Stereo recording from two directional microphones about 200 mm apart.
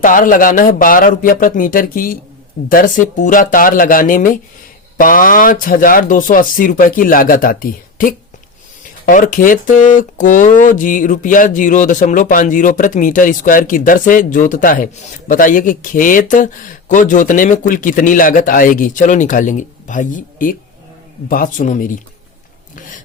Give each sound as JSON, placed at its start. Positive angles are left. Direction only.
{"t": 0.0, "sound": "speech", "side_deg": 40}